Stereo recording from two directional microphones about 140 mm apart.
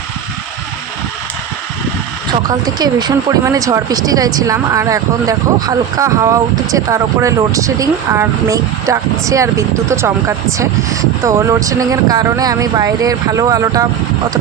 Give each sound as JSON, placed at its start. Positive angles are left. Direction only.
{"t": 2.5, "sound": "speech", "side_deg": -30}